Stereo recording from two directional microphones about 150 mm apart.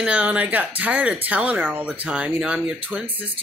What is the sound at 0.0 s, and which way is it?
Speech, 10° right (ahead or behind).